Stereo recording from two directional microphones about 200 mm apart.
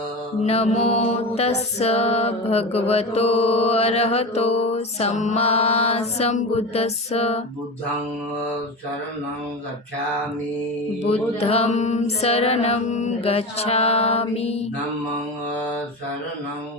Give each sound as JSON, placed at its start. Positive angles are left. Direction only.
{"t": 0.4, "sound": "music", "side_deg": 30}
{"t": 11.1, "sound": "music", "side_deg": 30}